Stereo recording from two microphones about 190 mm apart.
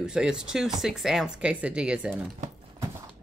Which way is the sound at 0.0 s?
5° right (ahead or behind).